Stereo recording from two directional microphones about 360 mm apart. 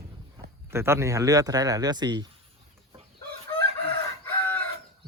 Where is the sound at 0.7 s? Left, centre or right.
Centre.